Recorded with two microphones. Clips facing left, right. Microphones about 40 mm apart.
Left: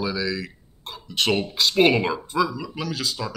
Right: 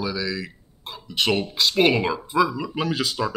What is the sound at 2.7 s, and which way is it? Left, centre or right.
Speech, right.